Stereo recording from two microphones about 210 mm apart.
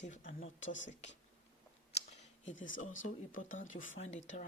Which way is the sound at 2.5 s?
65° left (ahead or behind).